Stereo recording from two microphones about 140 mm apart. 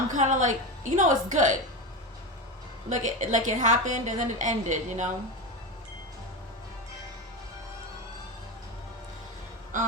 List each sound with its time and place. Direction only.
0.1 s a woman's voice: 60° right (ahead or behind)
2.9 s a woman's voice: 60° right (ahead or behind)